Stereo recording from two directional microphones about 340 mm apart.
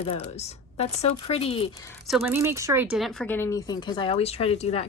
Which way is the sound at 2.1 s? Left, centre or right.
Centre.